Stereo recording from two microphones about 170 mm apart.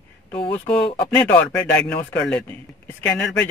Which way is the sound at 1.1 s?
10° left (ahead or behind).